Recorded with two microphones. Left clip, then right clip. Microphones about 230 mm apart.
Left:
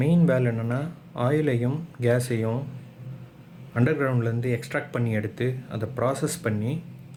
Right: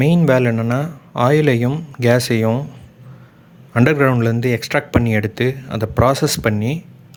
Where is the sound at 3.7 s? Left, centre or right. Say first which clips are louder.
Right 10 dB; right.